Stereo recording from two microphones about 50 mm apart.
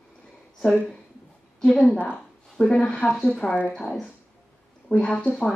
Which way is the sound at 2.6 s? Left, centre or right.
Left.